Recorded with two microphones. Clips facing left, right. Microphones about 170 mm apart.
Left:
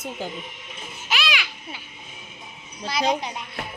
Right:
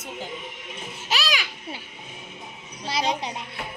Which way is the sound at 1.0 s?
40° right (ahead or behind).